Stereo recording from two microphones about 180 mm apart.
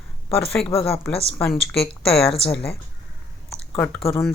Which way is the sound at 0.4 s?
5° left (ahead or behind).